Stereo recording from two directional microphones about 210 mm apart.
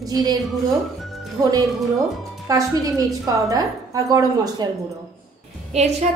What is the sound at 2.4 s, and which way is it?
A woman's voice, 15° right (ahead or behind).